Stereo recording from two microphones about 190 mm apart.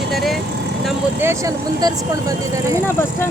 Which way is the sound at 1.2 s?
15° right (ahead or behind).